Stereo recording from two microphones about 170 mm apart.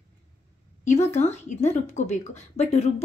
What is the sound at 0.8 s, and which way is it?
Speech, 40° left (ahead or behind).